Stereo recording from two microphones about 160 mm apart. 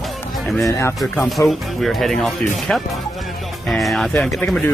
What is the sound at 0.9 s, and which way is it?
Speech, centre (ahead or behind).